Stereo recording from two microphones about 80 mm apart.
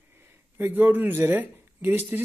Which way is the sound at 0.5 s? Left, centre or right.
Right.